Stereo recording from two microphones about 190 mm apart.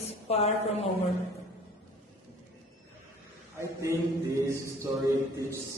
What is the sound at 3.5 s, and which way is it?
A man's voice, 15° right (ahead or behind).